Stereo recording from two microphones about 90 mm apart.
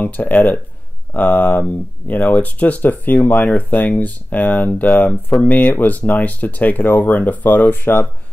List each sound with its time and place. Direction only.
0.0 s speech: 20° left (ahead or behind)